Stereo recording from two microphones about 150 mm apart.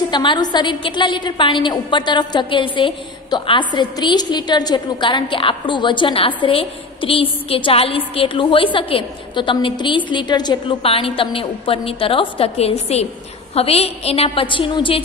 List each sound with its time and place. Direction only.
0.1 s a woman's voice: 30° left (ahead or behind)